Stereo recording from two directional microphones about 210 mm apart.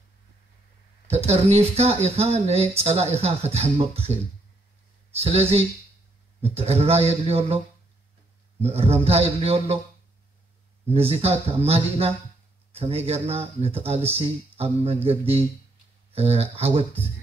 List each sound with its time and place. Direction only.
1.0 s speech: 30° right (ahead or behind)
10.9 s speech: 30° right (ahead or behind)